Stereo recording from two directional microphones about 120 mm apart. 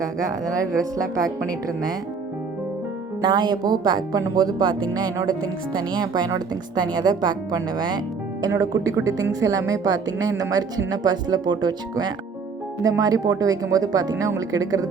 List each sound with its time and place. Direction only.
0.0 s speech: 25° right (ahead or behind)
3.2 s speech: 35° right (ahead or behind)